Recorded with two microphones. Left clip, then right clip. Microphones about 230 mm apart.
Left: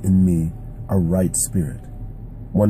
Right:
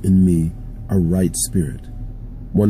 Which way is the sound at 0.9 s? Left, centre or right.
Left.